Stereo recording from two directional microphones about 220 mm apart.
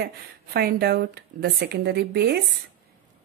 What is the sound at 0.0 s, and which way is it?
A woman's voice, 45° right (ahead or behind).